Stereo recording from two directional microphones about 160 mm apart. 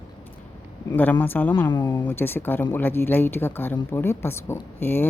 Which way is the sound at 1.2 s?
10° left (ahead or behind).